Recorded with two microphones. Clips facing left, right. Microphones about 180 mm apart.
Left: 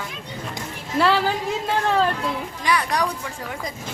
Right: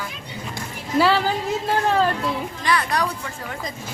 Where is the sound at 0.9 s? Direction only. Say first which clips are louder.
Right 1 dB; centre (ahead or behind).